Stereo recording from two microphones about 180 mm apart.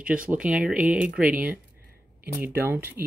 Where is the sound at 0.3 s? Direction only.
5° right (ahead or behind).